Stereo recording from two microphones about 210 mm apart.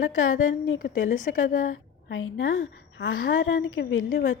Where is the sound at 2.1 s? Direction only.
70° left (ahead or behind).